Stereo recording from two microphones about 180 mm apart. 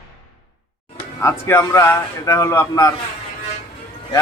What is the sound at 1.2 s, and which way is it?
Speech, 15° left (ahead or behind).